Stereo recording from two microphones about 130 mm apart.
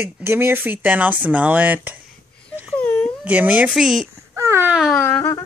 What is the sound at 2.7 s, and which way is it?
Whimper, 10° left (ahead or behind).